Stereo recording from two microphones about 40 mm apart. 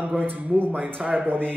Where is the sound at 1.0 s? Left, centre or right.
Right.